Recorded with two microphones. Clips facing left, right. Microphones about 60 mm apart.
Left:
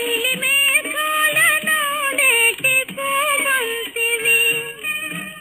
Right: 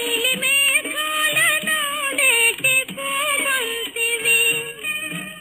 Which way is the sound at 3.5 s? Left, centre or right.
Left.